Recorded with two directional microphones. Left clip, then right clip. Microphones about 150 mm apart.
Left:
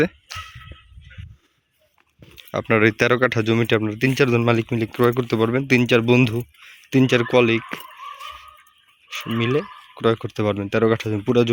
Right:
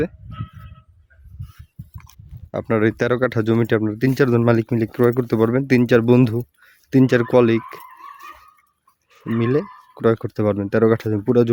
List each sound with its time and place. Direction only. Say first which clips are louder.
2.5 s speech: left 2 dB; 20° right (ahead or behind); by 7.8 s 45° right (ahead or behind)
9.0 s speech: right 1 dB; 50° right (ahead or behind)